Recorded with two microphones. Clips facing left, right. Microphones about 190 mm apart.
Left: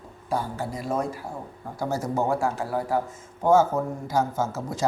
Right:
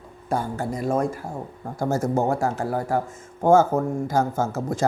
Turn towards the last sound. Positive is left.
turn(degrees=-50)  # may be behind; listen again after turning